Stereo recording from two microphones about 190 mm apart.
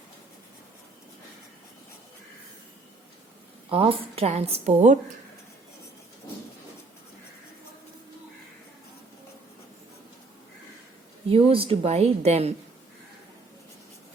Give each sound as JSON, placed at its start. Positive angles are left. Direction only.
{"t": 3.7, "sound": "a woman's voice", "side_deg": -30}
{"t": 11.3, "sound": "a woman's voice", "side_deg": -30}